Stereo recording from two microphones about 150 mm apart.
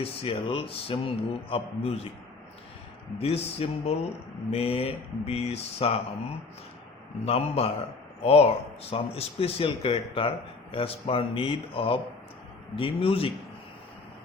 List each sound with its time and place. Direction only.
0.0 s speech: 40° left (ahead or behind)
3.2 s speech: 40° left (ahead or behind)
7.3 s speech: 40° left (ahead or behind)